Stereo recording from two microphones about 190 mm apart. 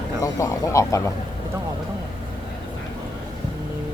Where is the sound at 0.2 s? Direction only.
15° left (ahead or behind).